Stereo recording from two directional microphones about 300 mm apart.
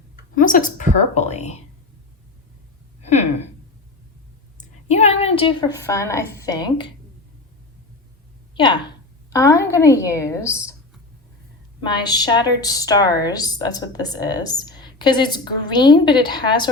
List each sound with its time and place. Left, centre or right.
0.3 s a woman's voice: left
3.0 s a sound: left
4.9 s a woman's voice: left
8.5 s a woman's voice: centre
11.8 s a woman's voice: centre